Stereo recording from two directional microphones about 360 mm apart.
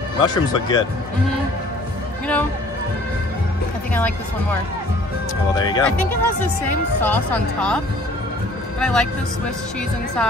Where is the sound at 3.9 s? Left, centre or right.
Centre.